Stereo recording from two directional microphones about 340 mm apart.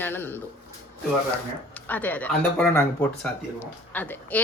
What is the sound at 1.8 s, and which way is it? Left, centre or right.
Speech, centre.